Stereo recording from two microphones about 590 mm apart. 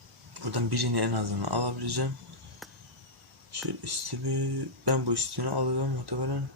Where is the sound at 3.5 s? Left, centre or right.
Right.